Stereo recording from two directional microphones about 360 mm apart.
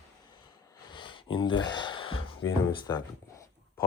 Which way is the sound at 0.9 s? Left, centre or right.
Centre.